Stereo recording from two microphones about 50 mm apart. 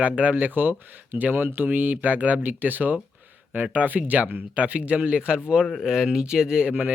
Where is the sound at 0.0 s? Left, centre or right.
Right.